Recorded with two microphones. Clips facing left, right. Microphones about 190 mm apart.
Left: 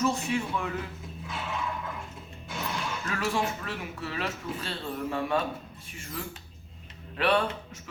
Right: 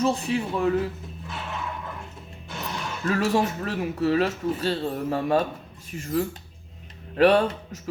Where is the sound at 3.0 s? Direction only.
40° right (ahead or behind).